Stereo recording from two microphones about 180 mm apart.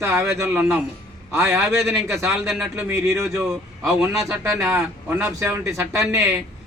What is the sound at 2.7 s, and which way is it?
Speech, 15° right (ahead or behind).